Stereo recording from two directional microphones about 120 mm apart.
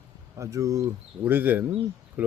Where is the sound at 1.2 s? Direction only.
15° right (ahead or behind).